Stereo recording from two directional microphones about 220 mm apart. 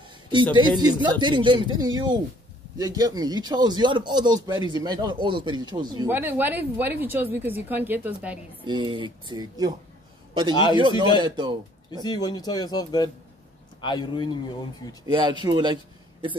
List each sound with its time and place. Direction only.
0.3 s speech: 20° right (ahead or behind)
6.0 s a woman's voice: 10° right (ahead or behind)
8.6 s speech: 20° right (ahead or behind)
10.5 s a man's voice: 20° left (ahead or behind)
11.1 s speech: 20° right (ahead or behind)
11.9 s a man's voice: 20° left (ahead or behind)
15.0 s speech: 20° right (ahead or behind)